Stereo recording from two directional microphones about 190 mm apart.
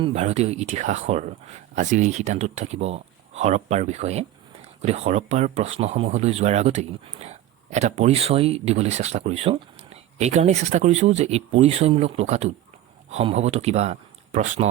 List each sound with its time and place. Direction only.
0.0 s speech: 35° right (ahead or behind)